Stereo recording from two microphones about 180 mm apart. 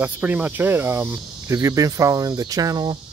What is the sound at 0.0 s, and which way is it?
Speech, 10° right (ahead or behind).